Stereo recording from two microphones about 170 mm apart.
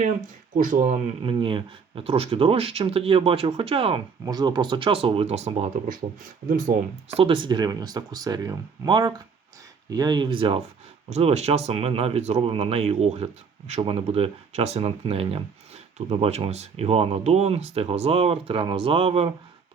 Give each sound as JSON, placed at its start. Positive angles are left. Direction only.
{"t": 0.5, "sound": "speech", "side_deg": -50}
{"t": 1.2, "sound": "speech", "side_deg": -30}
{"t": 5.7, "sound": "speech", "side_deg": -50}
{"t": 7.1, "sound": "speech", "side_deg": -30}